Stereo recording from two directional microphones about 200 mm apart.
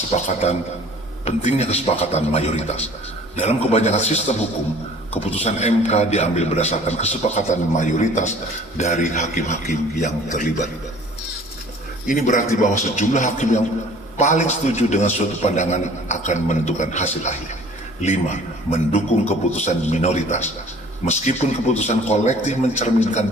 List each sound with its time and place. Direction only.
0.1 s a man's voice: 35° left (ahead or behind)
5.2 s a man's voice: 30° left (ahead or behind)
12.0 s a man's voice: 40° left (ahead or behind)